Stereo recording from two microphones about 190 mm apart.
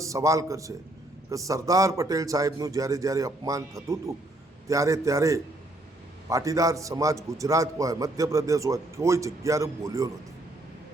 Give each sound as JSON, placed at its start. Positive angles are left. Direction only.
{"t": 0.0, "sound": "a man's voice", "side_deg": -15}